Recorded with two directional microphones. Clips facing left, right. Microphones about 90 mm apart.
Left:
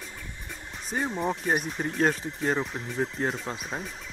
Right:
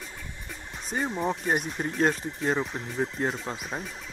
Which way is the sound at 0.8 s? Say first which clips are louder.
Even; centre (ahead or behind).